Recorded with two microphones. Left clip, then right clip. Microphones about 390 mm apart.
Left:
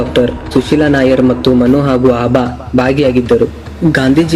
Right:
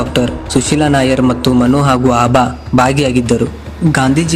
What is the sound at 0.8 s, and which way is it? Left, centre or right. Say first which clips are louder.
Speech: left 1 dB; right.